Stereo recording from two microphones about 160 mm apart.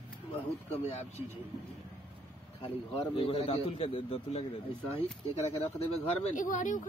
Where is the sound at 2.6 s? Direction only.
35° left (ahead or behind).